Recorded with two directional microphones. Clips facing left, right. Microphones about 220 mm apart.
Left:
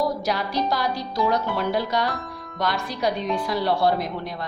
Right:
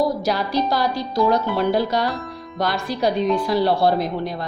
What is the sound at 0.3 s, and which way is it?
A woman's voice, 35° right (ahead or behind).